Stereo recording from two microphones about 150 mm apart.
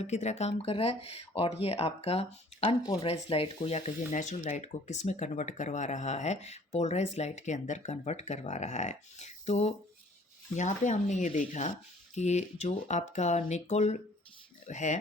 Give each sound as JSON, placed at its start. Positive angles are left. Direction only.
{"t": 0.0, "sound": "speech", "side_deg": 50}